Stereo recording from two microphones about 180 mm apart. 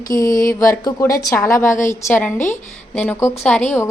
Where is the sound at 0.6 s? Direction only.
20° left (ahead or behind).